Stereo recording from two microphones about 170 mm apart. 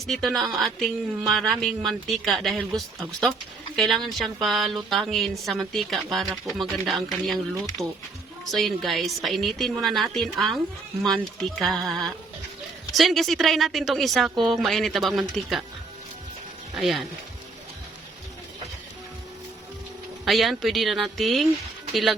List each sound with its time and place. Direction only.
0.0 s speech: centre (ahead or behind)
16.7 s speech: centre (ahead or behind)
20.2 s speech: centre (ahead or behind)